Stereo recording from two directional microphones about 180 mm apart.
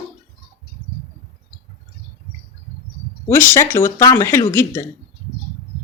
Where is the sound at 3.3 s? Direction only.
15° left (ahead or behind).